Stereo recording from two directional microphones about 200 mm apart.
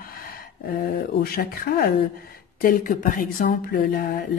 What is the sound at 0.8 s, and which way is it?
Speech, 50° left (ahead or behind).